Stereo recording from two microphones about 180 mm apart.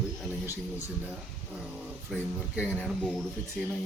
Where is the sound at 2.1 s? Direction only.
Centre (ahead or behind).